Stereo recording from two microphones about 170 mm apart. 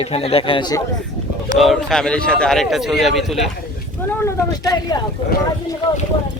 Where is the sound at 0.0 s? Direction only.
35° left (ahead or behind).